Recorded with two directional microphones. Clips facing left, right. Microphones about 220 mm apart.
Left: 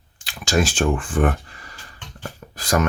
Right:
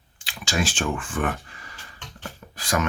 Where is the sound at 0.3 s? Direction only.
40° left (ahead or behind).